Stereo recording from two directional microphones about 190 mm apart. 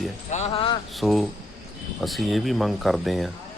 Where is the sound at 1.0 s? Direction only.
Centre (ahead or behind).